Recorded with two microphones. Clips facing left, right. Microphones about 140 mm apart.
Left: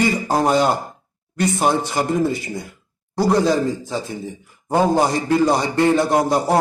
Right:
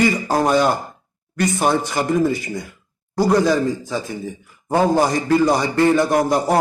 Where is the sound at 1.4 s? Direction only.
20° left (ahead or behind).